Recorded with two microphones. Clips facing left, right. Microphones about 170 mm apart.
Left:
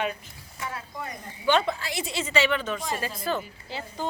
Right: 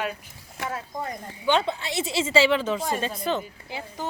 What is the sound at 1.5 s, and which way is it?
A woman's voice, 20° right (ahead or behind).